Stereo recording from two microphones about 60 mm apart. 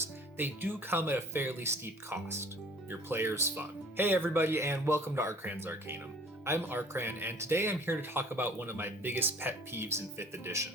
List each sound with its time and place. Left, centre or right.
0.3 s speech: right
7.3 s speech: right